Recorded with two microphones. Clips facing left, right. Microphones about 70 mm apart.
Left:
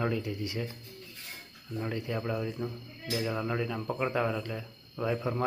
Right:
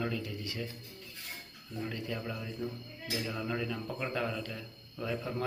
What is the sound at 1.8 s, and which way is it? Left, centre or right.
A man's voice, left.